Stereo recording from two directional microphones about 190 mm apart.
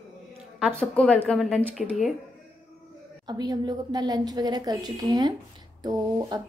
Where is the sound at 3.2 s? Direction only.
20° right (ahead or behind).